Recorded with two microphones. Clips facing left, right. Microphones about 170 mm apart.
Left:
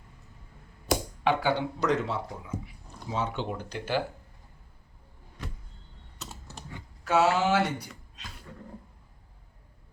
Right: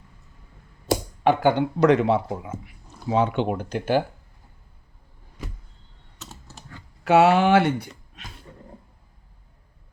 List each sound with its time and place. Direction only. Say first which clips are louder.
1.2 s speech: right 8 dB; 50° right (ahead or behind)
7.0 s speech: right 7 dB; 65° right (ahead or behind)
8.5 s a sound: left 4 dB; 25° right (ahead or behind)